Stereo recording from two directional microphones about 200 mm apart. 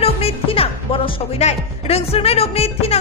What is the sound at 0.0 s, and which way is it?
Speech, 30° left (ahead or behind).